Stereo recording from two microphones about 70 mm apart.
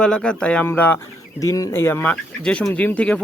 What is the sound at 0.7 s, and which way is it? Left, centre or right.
Speech, left.